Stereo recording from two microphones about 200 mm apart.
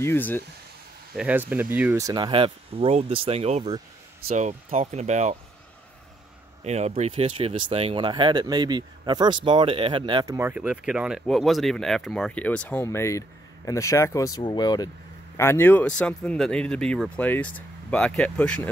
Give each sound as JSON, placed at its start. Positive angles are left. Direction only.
{"t": 0.0, "sound": "speech", "side_deg": 10}
{"t": 1.1, "sound": "speech", "side_deg": -5}
{"t": 6.6, "sound": "speech", "side_deg": -35}